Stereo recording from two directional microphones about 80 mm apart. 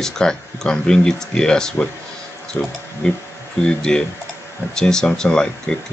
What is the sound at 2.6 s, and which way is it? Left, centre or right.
Speech, left.